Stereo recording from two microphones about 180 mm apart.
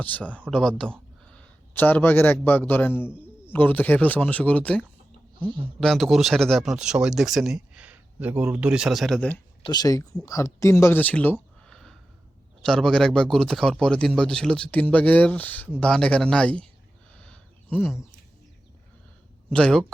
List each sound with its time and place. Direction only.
0.0 s a man's voice: 10° left (ahead or behind); by 1.0 s 10° right (ahead or behind)
1.7 s a man's voice: 10° left (ahead or behind)
3.1 s bird: 5° right (ahead or behind)
3.5 s a man's voice: 10° left (ahead or behind)
9.6 s a man's voice: 20° left (ahead or behind)
17.2 s a sound: 10° left (ahead or behind)
19.5 s a man's voice: 5° left (ahead or behind)